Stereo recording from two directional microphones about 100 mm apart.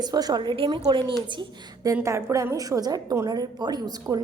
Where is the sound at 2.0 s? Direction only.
30° right (ahead or behind).